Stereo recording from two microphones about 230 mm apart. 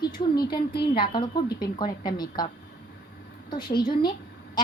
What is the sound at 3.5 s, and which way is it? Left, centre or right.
Speech, centre.